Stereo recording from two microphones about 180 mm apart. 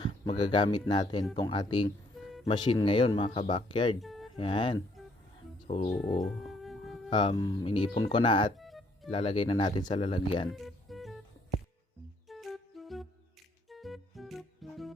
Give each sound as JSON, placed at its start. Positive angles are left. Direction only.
{"t": 0.0, "sound": "speech", "side_deg": 25}
{"t": 4.0, "sound": "a sound", "side_deg": 0}
{"t": 4.4, "sound": "speech", "side_deg": 30}
{"t": 5.6, "sound": "speech", "side_deg": 40}
{"t": 5.9, "sound": "music", "side_deg": 0}
{"t": 7.1, "sound": "speech", "side_deg": 25}
{"t": 8.5, "sound": "music", "side_deg": 0}
{"t": 9.0, "sound": "speech", "side_deg": 30}
{"t": 10.5, "sound": "music", "side_deg": 0}
{"t": 12.3, "sound": "music", "side_deg": 0}